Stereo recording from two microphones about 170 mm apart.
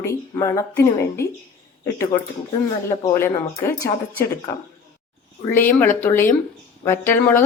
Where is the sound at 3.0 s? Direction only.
15° left (ahead or behind).